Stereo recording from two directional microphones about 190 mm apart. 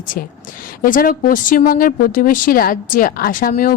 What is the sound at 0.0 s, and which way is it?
A woman's voice, 45° left (ahead or behind).